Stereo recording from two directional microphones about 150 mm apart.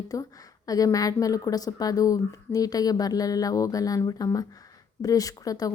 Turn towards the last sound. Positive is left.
turn(degrees=25)  # may be behind; listen again after turning